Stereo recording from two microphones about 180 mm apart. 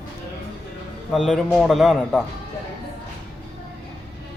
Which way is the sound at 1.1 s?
Centre (ahead or behind).